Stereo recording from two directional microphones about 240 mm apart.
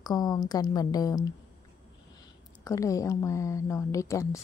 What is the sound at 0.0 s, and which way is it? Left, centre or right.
Speech, centre.